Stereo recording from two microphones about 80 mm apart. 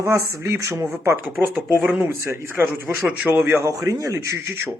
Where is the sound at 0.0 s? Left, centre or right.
Right.